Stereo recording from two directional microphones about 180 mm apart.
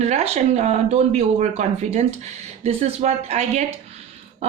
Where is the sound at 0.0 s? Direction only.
35° right (ahead or behind).